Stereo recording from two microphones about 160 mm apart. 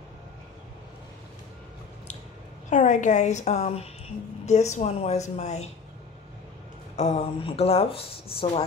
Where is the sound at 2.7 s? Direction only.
45° left (ahead or behind).